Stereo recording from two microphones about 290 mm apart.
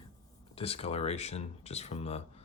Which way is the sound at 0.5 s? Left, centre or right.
Centre.